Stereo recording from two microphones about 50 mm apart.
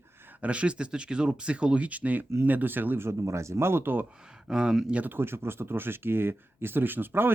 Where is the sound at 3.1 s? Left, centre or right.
Right.